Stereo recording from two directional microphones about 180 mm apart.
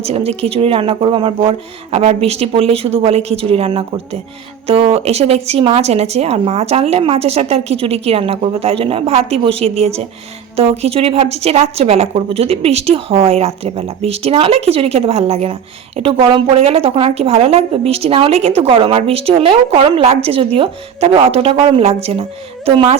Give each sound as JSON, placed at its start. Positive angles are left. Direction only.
{"t": 0.0, "sound": "a woman's voice", "side_deg": -35}